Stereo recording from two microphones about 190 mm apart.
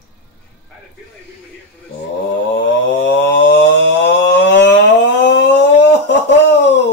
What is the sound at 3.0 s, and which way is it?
Mantra, 65° left (ahead or behind).